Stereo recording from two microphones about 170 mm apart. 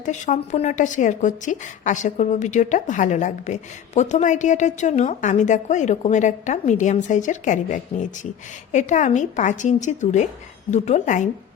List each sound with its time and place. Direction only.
0.0 s a woman's voice: 45° left (ahead or behind)